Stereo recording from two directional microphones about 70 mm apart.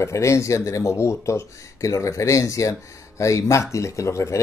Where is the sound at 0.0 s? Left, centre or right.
Left.